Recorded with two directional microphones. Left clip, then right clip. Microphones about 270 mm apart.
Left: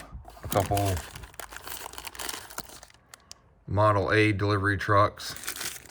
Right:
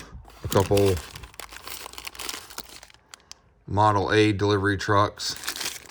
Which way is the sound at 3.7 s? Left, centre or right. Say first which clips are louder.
Right 3 dB; centre.